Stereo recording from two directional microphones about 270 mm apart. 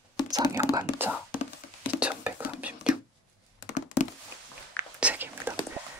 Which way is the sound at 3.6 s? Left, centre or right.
Left.